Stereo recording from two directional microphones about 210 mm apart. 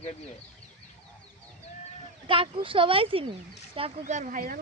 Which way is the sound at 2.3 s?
25° right (ahead or behind).